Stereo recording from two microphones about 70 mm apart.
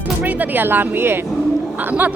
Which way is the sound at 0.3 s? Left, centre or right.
Right.